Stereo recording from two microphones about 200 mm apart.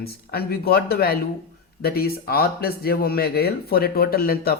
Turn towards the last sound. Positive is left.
turn(degrees=50)  # may be behind; listen again after turning